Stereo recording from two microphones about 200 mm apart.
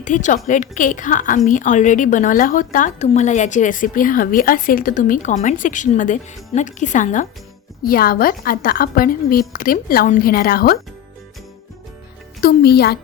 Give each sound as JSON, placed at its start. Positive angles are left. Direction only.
{"t": 0.0, "sound": "a woman's voice", "side_deg": 40}
{"t": 12.4, "sound": "a woman's voice", "side_deg": 50}